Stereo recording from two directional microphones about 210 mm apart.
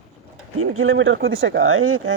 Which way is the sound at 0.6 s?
80° right.